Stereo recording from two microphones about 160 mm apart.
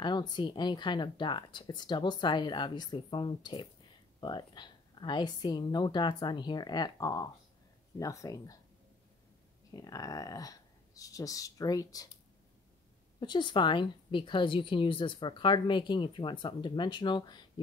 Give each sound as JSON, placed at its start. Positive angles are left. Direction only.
{"t": 0.0, "sound": "a woman's voice", "side_deg": 30}
{"t": 9.7, "sound": "a woman's voice", "side_deg": 20}
{"t": 13.2, "sound": "a woman's voice", "side_deg": 30}